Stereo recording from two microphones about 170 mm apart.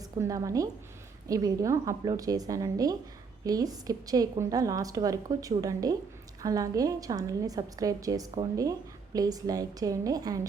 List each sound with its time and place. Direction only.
0.0 s a woman's voice: 20° right (ahead or behind)